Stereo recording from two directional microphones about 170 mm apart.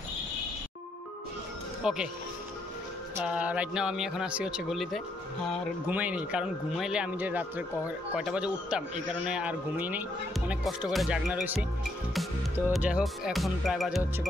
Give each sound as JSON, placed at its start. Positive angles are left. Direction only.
{"t": 1.8, "sound": "speech", "side_deg": -5}
{"t": 3.3, "sound": "a man's voice", "side_deg": -10}
{"t": 12.7, "sound": "speech", "side_deg": -5}